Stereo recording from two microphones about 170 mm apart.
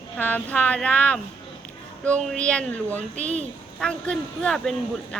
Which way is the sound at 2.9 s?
45° right (ahead or behind).